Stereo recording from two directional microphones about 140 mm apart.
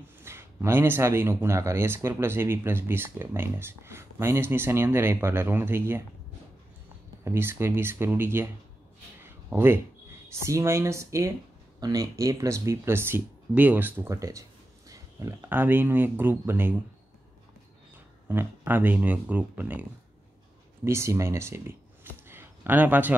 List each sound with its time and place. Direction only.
0.2 s speech: 15° right (ahead or behind)
7.2 s speech: 15° right (ahead or behind)
9.2 s a sound: 15° right (ahead or behind)
10.3 s speech: 20° right (ahead or behind)
17.9 s speech: 15° right (ahead or behind)
22.3 s a sound: 15° right (ahead or behind)